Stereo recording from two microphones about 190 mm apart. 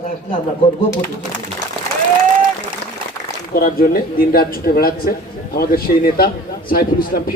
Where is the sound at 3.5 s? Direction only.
50° left (ahead or behind).